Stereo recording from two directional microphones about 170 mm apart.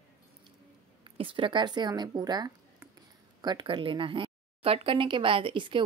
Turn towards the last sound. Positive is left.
turn(degrees=-30)  # may be behind; listen again after turning